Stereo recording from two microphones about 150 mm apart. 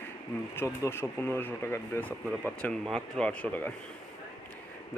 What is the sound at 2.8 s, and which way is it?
Speech, 5° left (ahead or behind).